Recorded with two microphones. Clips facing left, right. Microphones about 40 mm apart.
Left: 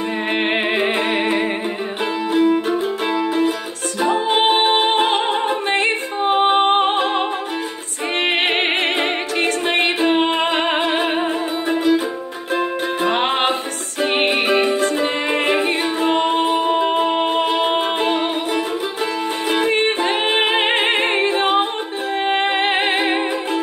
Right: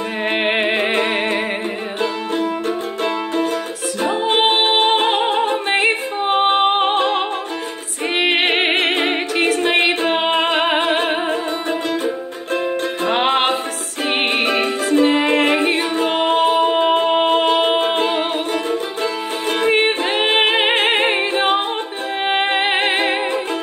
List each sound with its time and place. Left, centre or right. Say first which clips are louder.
0.3 s music: right 2 dB; centre
4.3 s music: right 1 dB; centre
8.2 s music: right 2 dB; centre
13.0 s music: right 1 dB; centre
15.2 s a capella: right 2 dB; centre
16.3 s music: right 2 dB; centre
16.5 s music: right 2 dB; centre
19.6 s music: right 3 dB; centre